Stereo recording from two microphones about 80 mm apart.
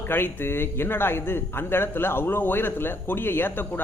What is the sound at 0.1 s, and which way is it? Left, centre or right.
A man's voice, left.